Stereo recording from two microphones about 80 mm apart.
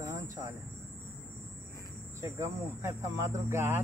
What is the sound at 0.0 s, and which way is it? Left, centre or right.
Vehicle, right.